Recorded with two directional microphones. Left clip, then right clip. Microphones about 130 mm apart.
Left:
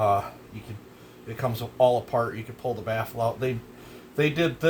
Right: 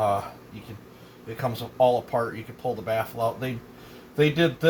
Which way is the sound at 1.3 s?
55° left (ahead or behind).